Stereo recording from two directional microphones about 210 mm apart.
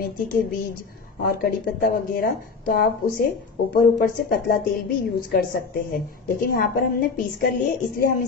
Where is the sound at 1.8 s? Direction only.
45° left (ahead or behind).